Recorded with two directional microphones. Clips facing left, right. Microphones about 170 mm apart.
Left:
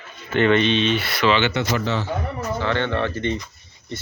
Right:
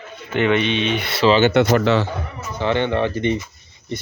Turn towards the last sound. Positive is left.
turn(degrees=-15)  # may be behind; listen again after turning